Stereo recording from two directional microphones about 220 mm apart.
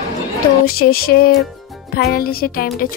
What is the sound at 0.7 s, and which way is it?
Speech, 45° left (ahead or behind).